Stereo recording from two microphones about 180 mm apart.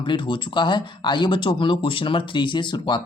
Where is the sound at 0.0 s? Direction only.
25° left (ahead or behind).